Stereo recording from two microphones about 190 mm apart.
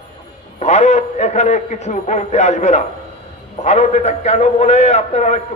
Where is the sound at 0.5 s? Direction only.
35° left (ahead or behind).